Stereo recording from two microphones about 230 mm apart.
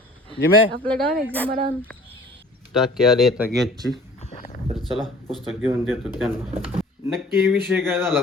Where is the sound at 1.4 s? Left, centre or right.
Right.